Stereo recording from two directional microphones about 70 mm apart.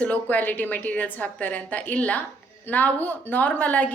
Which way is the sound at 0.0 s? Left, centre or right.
Left.